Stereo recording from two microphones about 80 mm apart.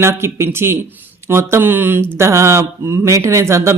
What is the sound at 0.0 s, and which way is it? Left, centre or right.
Mantra, right.